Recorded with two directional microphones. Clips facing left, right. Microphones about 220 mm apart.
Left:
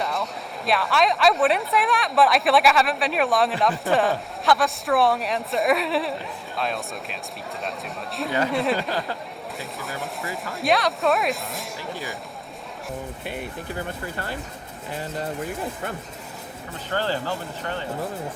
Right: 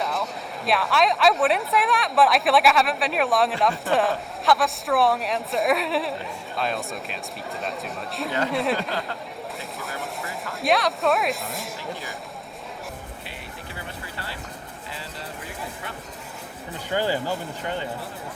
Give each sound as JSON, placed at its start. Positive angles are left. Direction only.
{"t": 0.0, "sound": "speech", "side_deg": 0}
{"t": 9.6, "sound": "a sound", "side_deg": 0}
{"t": 13.2, "sound": "speech", "side_deg": 50}
{"t": 16.9, "sound": "speech", "side_deg": -15}